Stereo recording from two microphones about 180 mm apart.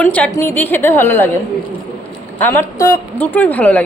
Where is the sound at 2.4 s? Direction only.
10° left (ahead or behind).